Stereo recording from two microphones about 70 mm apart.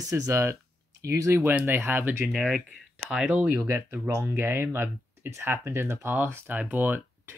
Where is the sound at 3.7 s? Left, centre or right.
Right.